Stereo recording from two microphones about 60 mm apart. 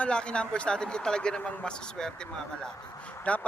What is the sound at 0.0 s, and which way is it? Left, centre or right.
A man's voice, centre.